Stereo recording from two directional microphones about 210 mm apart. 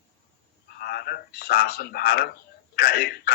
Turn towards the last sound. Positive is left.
turn(degrees=45)  # may be behind; listen again after turning